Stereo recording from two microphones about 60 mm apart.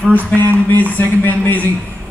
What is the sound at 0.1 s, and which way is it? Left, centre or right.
Speech, left.